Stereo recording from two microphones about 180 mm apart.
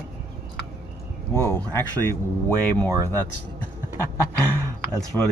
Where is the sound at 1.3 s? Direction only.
15° left (ahead or behind).